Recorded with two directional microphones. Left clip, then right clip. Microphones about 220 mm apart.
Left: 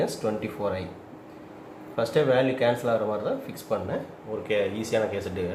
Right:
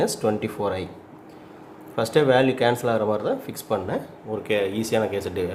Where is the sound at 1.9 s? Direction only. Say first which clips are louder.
Right 4 dB; 55° right (ahead or behind).